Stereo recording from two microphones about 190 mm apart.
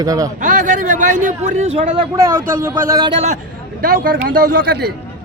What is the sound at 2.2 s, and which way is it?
Speech, 15° right (ahead or behind).